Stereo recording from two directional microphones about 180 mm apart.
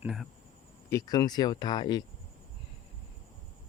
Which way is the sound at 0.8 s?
20° left (ahead or behind).